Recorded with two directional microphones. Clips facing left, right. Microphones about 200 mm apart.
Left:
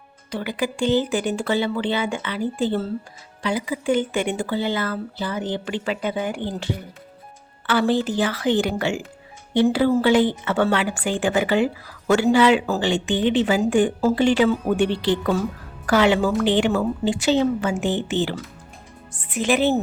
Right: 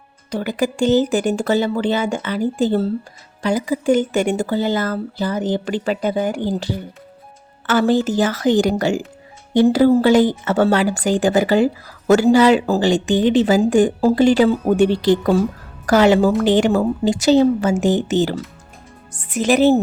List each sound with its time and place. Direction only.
0.3 s a woman's voice: 45° right (ahead or behind)